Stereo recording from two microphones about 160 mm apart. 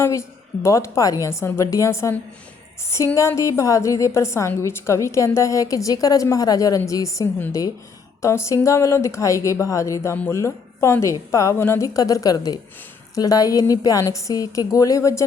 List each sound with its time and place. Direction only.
0.0 s a woman's voice: 15° left (ahead or behind)